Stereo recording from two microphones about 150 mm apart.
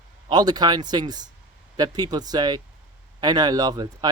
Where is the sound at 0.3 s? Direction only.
25° right (ahead or behind).